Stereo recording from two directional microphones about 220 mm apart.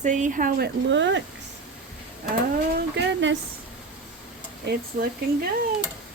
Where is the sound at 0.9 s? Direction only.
55° right (ahead or behind).